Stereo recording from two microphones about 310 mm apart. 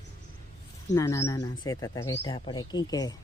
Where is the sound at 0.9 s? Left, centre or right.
Centre.